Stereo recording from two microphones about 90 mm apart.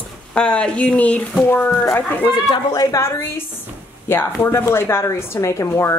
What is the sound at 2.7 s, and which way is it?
Speech, 45° left (ahead or behind).